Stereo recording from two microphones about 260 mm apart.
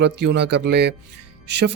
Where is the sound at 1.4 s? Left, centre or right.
Right.